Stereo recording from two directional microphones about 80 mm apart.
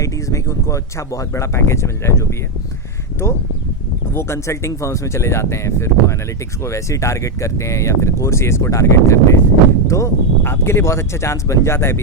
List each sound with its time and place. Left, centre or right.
0.0 s speech: left